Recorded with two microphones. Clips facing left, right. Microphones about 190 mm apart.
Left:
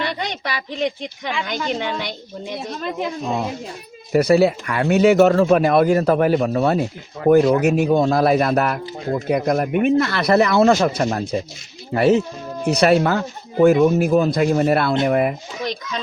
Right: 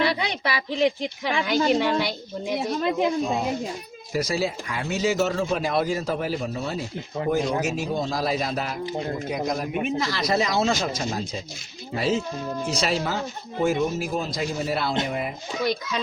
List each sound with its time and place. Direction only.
0.0 s a woman's voice: 5° right (ahead or behind)
4.1 s speech: 60° left (ahead or behind)
15.6 s a child's voice: 5° right (ahead or behind)